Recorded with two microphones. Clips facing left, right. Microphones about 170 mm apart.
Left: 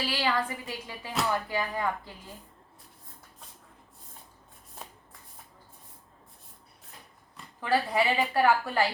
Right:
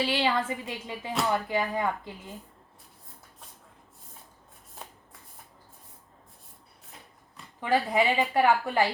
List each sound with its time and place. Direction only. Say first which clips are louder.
0.0 s a woman's voice: right 3 dB; 20° right (ahead or behind)
7.6 s a woman's voice: right 2 dB; 15° right (ahead or behind)